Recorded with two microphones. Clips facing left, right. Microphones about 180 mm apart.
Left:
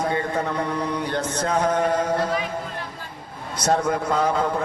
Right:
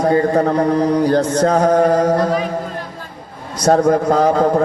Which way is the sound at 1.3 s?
65° right (ahead or behind).